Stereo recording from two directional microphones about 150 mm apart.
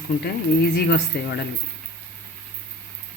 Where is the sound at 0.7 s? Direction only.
90° left.